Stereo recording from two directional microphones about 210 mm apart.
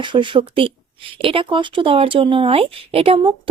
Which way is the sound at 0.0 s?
25° right (ahead or behind).